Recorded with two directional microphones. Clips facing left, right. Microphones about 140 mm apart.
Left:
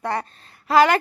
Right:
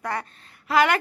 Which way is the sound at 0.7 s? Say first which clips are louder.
Left 4 dB; 35° left (ahead or behind).